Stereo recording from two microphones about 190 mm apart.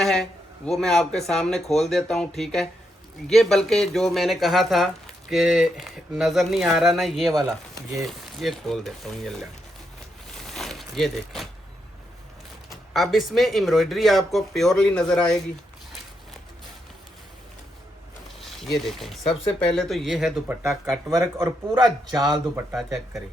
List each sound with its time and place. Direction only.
0.0 s speech: 5° left (ahead or behind)
10.3 s a sound: centre (ahead or behind)
12.7 s speech: centre (ahead or behind)
18.3 s a sound: centre (ahead or behind)
18.9 s speech: centre (ahead or behind)
20.9 s speech: 15° right (ahead or behind)